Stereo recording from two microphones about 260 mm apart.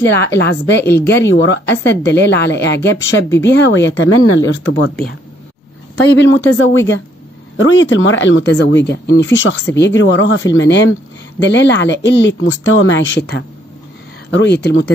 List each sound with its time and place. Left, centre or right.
0.1 s speech: left
6.4 s speech: left